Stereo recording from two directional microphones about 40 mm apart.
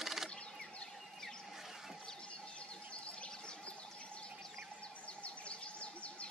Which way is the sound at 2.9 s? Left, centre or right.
Left.